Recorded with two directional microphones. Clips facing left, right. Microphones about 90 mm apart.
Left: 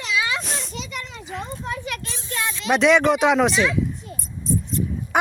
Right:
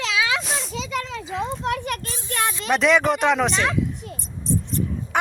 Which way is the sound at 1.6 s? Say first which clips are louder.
Right 5 dB; 70° right (ahead or behind).